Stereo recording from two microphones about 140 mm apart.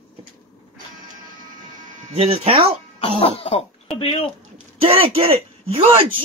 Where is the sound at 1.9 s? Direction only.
60° right (ahead or behind).